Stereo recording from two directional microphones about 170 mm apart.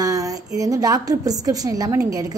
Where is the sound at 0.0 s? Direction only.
20° right (ahead or behind).